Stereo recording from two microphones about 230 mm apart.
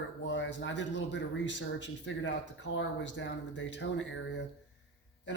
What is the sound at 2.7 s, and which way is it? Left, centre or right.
Speech, left.